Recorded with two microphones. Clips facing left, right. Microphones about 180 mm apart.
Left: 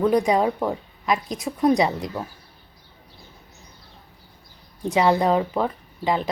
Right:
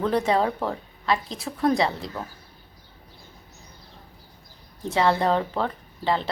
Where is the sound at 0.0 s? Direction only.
15° left (ahead or behind).